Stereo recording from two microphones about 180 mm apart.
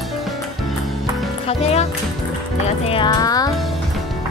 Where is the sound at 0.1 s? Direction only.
Centre (ahead or behind).